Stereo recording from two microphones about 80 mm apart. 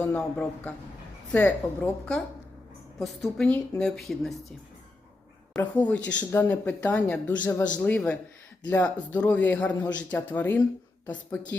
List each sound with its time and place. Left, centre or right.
0.0 s a man's voice: centre
3.0 s a woman's voice: centre
5.7 s a man's voice: centre